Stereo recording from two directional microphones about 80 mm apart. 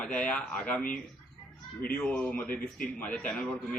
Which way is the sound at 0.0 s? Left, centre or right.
Centre.